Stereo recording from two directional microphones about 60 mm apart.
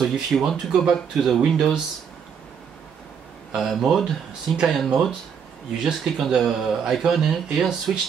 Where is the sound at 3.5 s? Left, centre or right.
Centre.